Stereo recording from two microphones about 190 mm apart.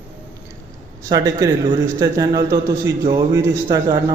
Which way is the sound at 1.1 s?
20° right (ahead or behind).